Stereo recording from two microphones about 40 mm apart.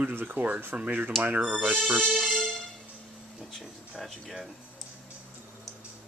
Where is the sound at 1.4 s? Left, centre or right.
Right.